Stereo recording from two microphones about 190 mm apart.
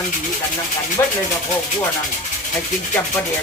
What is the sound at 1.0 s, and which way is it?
Speech, 15° left (ahead or behind).